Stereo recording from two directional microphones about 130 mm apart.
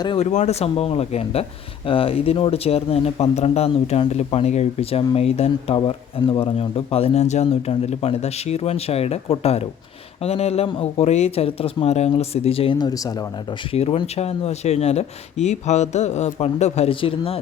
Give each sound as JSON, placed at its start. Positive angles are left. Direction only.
{"t": 0.2, "sound": "speech", "side_deg": 60}
{"t": 13.7, "sound": "speech", "side_deg": 50}